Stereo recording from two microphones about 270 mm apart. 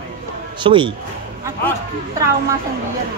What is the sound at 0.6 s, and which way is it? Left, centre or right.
Speech, centre.